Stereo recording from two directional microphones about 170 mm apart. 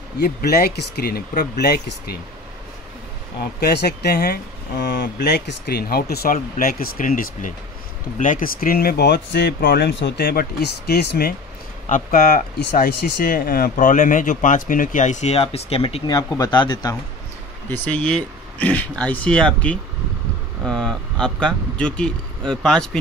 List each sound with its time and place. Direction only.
0.2 s speech: 65° left (ahead or behind)
3.6 s speech: 70° left (ahead or behind)
11.9 s speech: 55° left (ahead or behind); by 16.0 s 35° left (ahead or behind)
16.1 s speech: 25° left (ahead or behind)
17.8 s speech: 5° left (ahead or behind)